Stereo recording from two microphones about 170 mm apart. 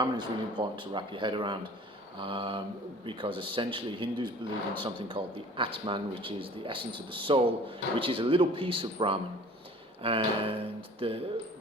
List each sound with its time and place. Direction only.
0.0 s a man's voice: 25° right (ahead or behind)